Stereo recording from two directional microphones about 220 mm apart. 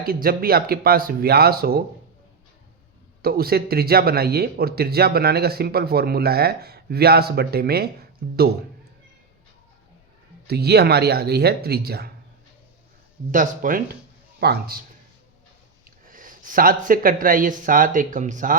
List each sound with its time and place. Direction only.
0.0 s a man's voice: 40° right (ahead or behind)
3.2 s a man's voice: 45° right (ahead or behind)
10.4 s a man's voice: 45° right (ahead or behind)
13.3 s a man's voice: 35° right (ahead or behind)